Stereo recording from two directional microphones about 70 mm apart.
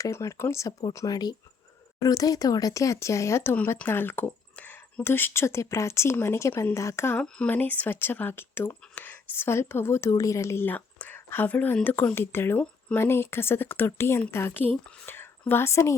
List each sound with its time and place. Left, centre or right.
0.0 s speech: left
1.1 s speech: left
2.0 s speech: left
3.8 s speech: left
4.5 s a sound: left
5.0 s speech: left
7.2 s speech: centre; by 10.1 s left
10.1 s speech: left
10.7 s a sound: left
11.3 s a woman's voice: left